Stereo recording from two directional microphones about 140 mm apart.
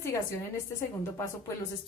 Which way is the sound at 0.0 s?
20° left (ahead or behind).